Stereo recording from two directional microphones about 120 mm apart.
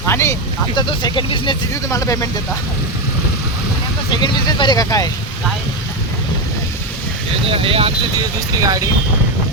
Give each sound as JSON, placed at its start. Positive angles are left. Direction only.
{"t": 0.1, "sound": "a sound", "side_deg": 20}
{"t": 0.8, "sound": "speech", "side_deg": 40}
{"t": 1.7, "sound": "speech", "side_deg": 25}
{"t": 4.2, "sound": "speech", "side_deg": 40}
{"t": 7.4, "sound": "speech", "side_deg": -50}
{"t": 8.6, "sound": "speech", "side_deg": -30}